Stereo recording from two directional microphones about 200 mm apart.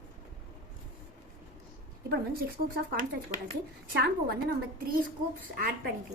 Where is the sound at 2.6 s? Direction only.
50° right (ahead or behind).